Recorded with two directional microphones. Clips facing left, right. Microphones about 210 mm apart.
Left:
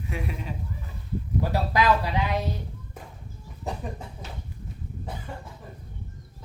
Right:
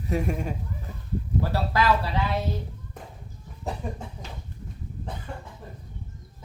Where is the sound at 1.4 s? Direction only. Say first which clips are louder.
Left 1 dB; 15° left (ahead or behind).